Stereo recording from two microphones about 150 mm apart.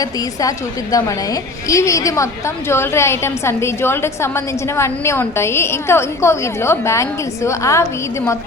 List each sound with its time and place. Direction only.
0.0 s a woman's voice: 25° left (ahead or behind)